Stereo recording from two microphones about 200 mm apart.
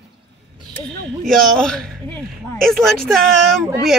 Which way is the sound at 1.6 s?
5° left (ahead or behind).